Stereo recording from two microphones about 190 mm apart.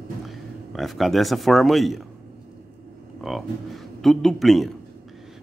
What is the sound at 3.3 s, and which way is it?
Speech, centre (ahead or behind).